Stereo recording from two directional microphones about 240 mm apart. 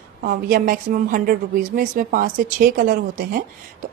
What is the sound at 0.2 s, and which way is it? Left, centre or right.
Speech, right.